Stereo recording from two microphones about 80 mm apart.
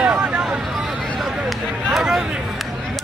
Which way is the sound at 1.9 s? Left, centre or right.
Centre.